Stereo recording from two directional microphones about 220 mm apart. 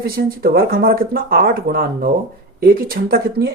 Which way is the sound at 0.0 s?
40° right (ahead or behind).